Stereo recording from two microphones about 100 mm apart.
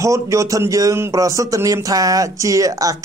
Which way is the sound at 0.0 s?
30° right (ahead or behind).